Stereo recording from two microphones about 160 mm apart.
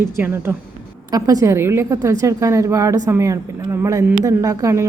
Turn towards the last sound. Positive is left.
turn(degrees=-20)  # may be behind; listen again after turning